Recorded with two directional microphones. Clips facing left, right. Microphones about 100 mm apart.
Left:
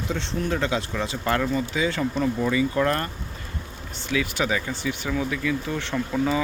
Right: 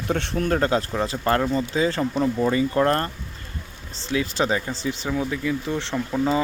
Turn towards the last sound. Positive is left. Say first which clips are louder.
# right 1 dB
turn(degrees=-10)  # may be behind; listen again after turning